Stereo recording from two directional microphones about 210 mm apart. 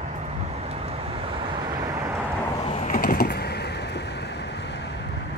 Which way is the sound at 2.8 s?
45° left (ahead or behind).